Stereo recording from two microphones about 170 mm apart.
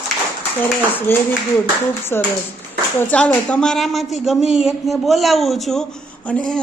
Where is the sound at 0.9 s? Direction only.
10° left (ahead or behind).